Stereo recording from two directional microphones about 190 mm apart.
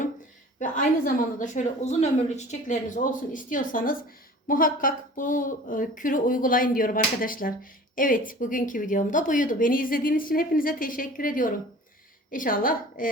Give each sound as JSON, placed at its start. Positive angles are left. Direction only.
{"t": 0.6, "sound": "speech", "side_deg": 45}